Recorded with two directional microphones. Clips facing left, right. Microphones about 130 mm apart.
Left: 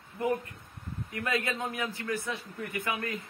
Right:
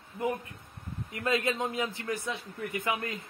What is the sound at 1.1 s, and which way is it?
A man's voice, 25° right (ahead or behind).